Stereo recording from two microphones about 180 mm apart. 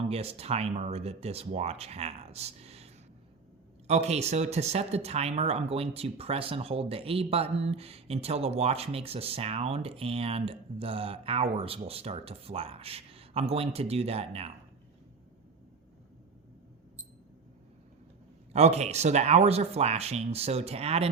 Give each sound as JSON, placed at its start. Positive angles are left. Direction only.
{"t": 0.1, "sound": "speech", "side_deg": -35}
{"t": 18.5, "sound": "speech", "side_deg": -40}